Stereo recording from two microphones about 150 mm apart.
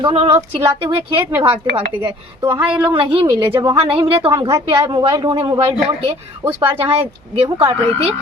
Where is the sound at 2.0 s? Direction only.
30° right (ahead or behind).